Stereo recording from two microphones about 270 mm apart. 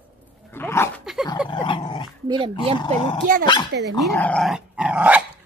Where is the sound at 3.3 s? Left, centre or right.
Right.